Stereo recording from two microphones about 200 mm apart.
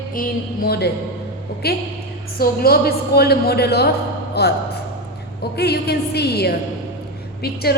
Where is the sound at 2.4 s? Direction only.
50° left (ahead or behind).